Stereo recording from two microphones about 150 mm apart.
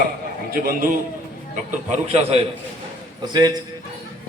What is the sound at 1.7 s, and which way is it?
Speech, 50° right (ahead or behind).